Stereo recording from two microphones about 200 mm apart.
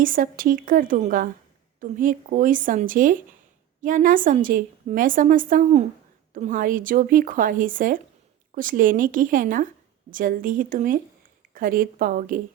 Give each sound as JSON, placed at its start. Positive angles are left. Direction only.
{"t": 0.0, "sound": "a woman's voice", "side_deg": -45}